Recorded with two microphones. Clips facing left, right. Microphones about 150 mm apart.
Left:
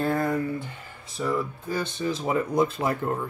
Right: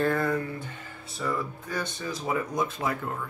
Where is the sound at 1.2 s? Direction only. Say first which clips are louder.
Left 4 dB; 10° left (ahead or behind).